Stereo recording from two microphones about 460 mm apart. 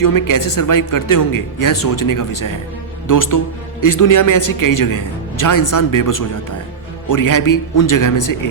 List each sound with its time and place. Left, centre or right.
0.0 s speech: left